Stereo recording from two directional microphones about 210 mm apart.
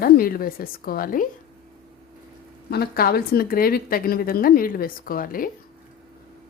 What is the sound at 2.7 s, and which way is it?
Speech, 50° left (ahead or behind).